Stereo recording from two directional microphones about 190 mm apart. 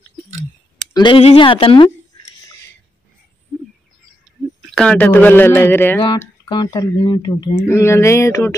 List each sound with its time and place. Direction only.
0.9 s speech: 25° left (ahead or behind)
4.6 s speech: centre (ahead or behind)
6.5 s speech: 20° left (ahead or behind)